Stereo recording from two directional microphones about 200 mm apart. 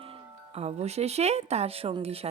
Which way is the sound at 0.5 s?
30° right (ahead or behind).